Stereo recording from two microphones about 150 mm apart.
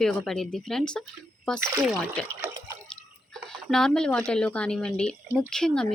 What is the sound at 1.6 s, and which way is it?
Speech, 20° right (ahead or behind).